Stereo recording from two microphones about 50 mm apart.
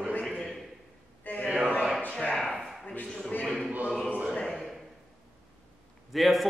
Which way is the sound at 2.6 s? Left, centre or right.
Centre.